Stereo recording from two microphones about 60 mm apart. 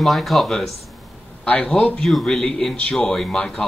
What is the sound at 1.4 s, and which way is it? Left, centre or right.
Speech, left.